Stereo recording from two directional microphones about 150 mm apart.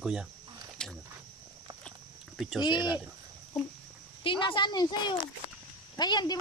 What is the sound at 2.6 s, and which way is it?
Speech, 30° left (ahead or behind).